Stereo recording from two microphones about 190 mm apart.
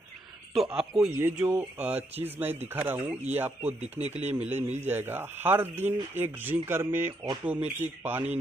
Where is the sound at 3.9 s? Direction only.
35° right (ahead or behind).